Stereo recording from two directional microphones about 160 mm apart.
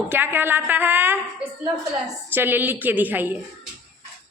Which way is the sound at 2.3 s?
10° right (ahead or behind).